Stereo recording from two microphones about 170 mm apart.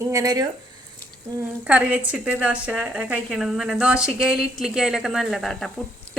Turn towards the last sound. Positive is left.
turn(degrees=0)  # may be behind; listen again after turning